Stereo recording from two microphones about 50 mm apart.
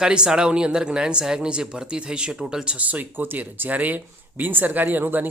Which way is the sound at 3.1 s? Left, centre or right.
Right.